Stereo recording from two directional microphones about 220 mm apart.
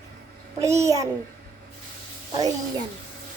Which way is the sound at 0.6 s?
15° right (ahead or behind).